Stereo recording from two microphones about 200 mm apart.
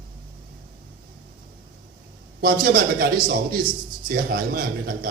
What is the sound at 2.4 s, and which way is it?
A man's voice, 50° right (ahead or behind).